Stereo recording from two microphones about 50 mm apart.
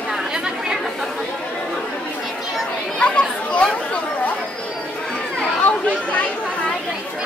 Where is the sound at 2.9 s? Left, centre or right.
Left.